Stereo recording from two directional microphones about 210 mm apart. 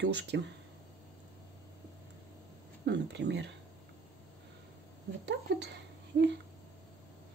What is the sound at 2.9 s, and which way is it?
Speech, 55° right (ahead or behind).